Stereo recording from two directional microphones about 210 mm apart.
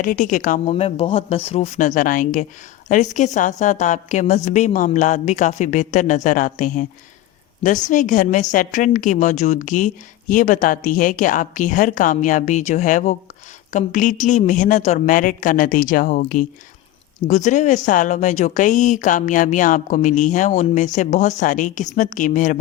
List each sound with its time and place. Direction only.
0.0 s speech: 40° left (ahead or behind)
0.7 s speech: 25° left (ahead or behind)
7.9 s speech: 35° left (ahead or behind)